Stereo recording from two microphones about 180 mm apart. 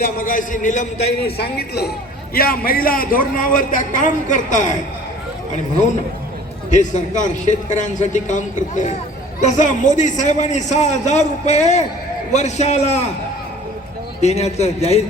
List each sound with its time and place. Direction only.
0.0 s a man's voice: 50° left (ahead or behind)
1.2 s a man's voice: 65° left (ahead or behind); by 4.8 s 45° left (ahead or behind)
6.7 s a man's voice: 40° left (ahead or behind)
14.2 s a man's voice: 35° left (ahead or behind)